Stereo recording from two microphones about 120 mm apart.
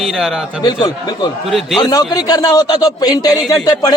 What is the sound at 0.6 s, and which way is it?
Speech, 40° left (ahead or behind).